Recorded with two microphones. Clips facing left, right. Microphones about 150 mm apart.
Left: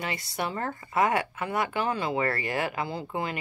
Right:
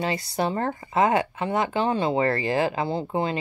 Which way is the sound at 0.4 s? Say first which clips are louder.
Right 5 dB; 30° right (ahead or behind).